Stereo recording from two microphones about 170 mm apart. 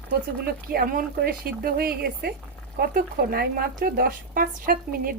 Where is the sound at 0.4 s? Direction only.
60° right (ahead or behind).